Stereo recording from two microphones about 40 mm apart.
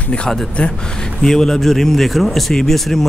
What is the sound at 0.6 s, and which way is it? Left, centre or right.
Speech, left.